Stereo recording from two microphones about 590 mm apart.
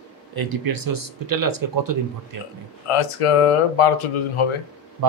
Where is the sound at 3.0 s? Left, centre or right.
Left.